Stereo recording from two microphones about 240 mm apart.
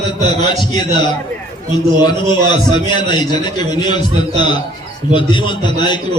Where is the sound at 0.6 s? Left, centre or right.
Centre.